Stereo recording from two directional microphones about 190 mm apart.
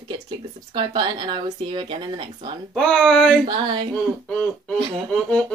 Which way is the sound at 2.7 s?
Centre (ahead or behind).